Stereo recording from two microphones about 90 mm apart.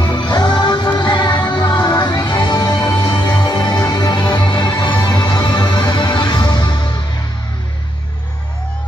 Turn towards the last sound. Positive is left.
turn(degrees=55)  # may be behind; listen again after turning